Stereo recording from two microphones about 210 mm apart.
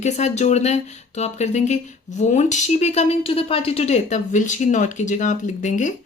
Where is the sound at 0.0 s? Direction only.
35° left (ahead or behind).